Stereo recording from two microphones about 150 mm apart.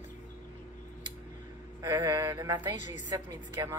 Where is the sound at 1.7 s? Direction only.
20° right (ahead or behind).